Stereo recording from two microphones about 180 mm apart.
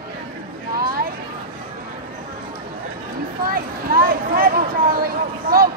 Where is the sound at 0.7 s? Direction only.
55° right (ahead or behind).